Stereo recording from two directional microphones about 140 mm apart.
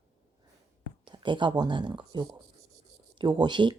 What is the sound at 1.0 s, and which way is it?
A woman's voice, 35° right (ahead or behind).